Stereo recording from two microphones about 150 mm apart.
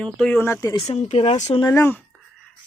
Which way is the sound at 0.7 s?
45° left (ahead or behind).